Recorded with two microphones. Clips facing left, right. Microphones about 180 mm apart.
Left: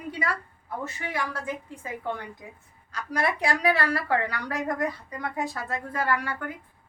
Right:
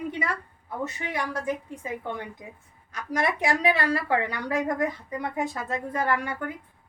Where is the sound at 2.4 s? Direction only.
20° right (ahead or behind).